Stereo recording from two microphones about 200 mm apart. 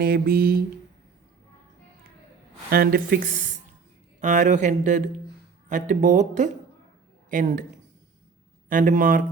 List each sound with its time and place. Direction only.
0.0 s speech: 50° right (ahead or behind)
2.6 s speech: 50° right (ahead or behind)
8.7 s speech: 40° right (ahead or behind)